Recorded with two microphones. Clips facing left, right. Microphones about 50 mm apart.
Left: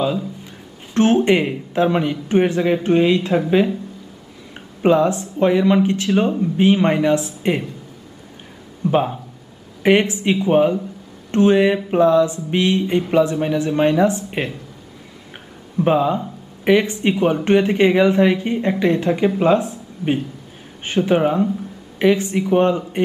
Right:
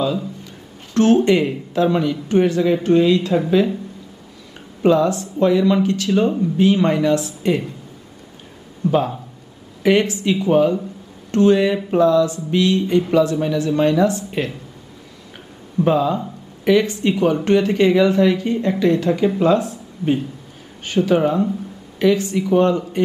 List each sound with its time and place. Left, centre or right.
0.9 s speech: left
4.8 s speech: left
8.9 s speech: left
15.8 s speech: left